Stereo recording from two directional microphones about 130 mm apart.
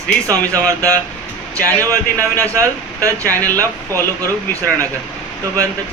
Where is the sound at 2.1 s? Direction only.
15° left (ahead or behind).